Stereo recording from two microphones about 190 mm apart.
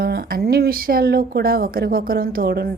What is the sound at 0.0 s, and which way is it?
Speech, 55° right (ahead or behind).